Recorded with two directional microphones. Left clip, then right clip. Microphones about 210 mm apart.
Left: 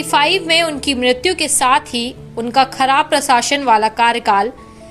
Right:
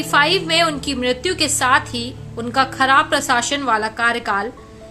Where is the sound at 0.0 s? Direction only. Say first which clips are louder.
Left 2 dB; 15° left (ahead or behind).